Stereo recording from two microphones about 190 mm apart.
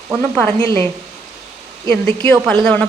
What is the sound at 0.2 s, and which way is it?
Speech, 10° left (ahead or behind).